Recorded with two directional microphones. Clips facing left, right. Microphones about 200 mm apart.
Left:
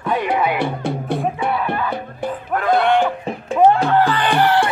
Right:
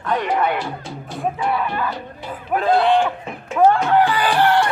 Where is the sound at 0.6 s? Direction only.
60° left (ahead or behind).